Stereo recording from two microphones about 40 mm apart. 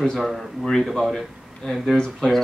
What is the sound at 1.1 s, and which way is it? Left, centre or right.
A man's voice, centre.